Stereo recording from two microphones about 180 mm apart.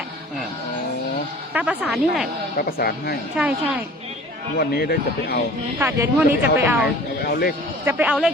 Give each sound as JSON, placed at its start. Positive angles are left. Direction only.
{"t": 1.5, "sound": "a woman's voice", "side_deg": -5}
{"t": 2.6, "sound": "speech", "side_deg": 55}
{"t": 3.3, "sound": "a woman's voice", "side_deg": -5}
{"t": 4.5, "sound": "speech", "side_deg": 60}
{"t": 5.8, "sound": "speech", "side_deg": -10}
{"t": 7.3, "sound": "speech", "side_deg": 60}
{"t": 7.9, "sound": "speech", "side_deg": -10}